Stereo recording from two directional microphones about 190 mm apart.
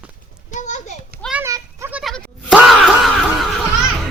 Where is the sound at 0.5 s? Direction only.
40° left (ahead or behind).